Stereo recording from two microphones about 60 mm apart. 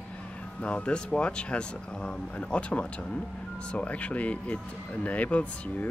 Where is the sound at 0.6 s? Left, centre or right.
Centre.